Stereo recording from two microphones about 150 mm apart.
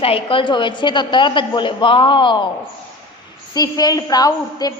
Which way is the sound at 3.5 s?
25° left (ahead or behind).